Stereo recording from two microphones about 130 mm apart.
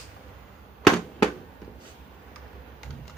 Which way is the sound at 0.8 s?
10° left (ahead or behind).